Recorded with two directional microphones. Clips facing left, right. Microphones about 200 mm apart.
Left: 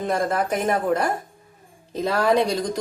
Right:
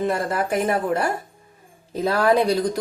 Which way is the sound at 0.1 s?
5° right (ahead or behind).